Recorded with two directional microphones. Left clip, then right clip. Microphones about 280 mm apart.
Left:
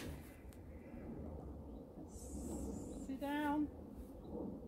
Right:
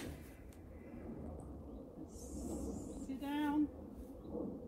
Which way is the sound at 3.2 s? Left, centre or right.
Centre.